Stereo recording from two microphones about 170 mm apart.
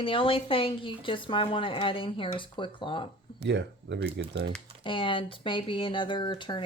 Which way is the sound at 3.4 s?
90° right.